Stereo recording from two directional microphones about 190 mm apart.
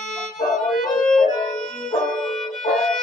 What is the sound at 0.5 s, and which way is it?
Music, centre (ahead or behind).